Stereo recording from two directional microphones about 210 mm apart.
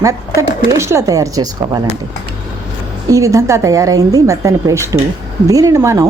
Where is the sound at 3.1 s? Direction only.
15° right (ahead or behind).